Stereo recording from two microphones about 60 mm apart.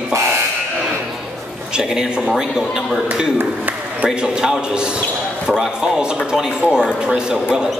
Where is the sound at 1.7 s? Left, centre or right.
Centre.